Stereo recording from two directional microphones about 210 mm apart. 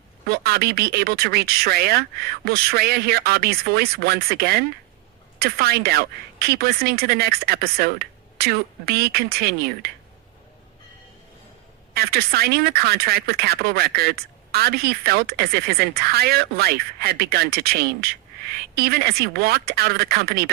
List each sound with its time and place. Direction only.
0.3 s speech: 50° right (ahead or behind)
11.9 s speech: 45° right (ahead or behind)